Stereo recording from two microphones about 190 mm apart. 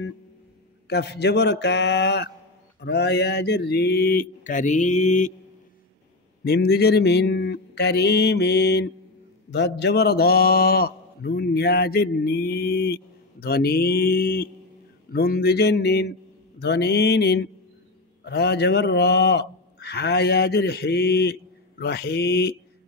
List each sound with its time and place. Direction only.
0.8 s a man's voice: 60° left (ahead or behind); by 5.3 s 40° left (ahead or behind)
6.4 s a man's voice: 60° left (ahead or behind)